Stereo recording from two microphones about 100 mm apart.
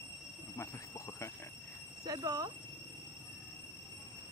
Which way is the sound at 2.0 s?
40° right (ahead or behind).